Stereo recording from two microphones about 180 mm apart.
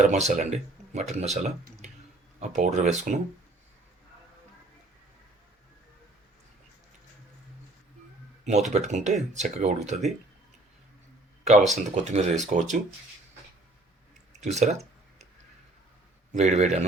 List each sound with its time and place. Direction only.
0.0 s speech: 40° right (ahead or behind)
8.4 s speech: 40° right (ahead or behind)
11.4 s speech: 40° right (ahead or behind)
14.4 s speech: 40° right (ahead or behind)
16.3 s speech: 40° right (ahead or behind)